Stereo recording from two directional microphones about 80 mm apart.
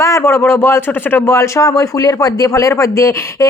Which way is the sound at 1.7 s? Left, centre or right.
Left.